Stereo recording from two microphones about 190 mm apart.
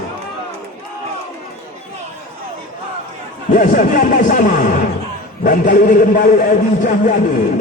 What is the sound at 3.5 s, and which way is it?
A man's voice, 45° left (ahead or behind).